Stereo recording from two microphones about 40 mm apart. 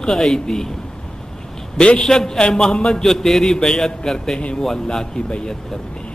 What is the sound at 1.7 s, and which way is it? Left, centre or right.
A man's voice, left.